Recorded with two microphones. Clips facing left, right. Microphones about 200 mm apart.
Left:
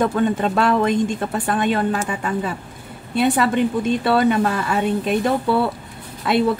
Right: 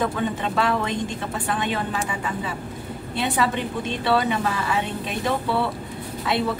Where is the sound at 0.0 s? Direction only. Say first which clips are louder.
Left 6 dB; 45° left (ahead or behind).